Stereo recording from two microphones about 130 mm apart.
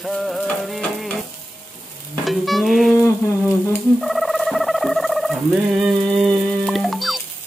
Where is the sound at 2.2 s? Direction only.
Centre (ahead or behind).